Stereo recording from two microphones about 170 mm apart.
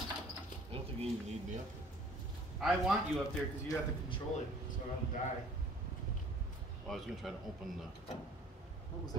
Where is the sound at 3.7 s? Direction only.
30° left (ahead or behind).